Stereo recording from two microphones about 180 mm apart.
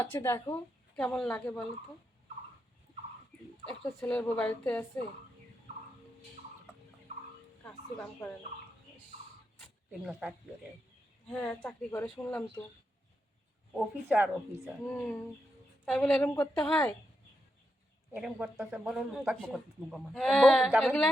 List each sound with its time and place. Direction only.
0.0 s speech: 15° left (ahead or behind)
0.9 s speech: 5° left (ahead or behind)
3.8 s speech: 10° left (ahead or behind)
10.0 s speech: 5° right (ahead or behind)
13.7 s speech: 10° right (ahead or behind)
14.8 s speech: 10° left (ahead or behind)
16.3 s speech: 15° left (ahead or behind)
18.1 s speech: 5° right (ahead or behind)